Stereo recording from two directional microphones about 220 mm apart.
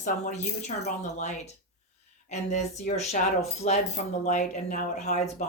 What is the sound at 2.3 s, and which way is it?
Speech, 30° left (ahead or behind).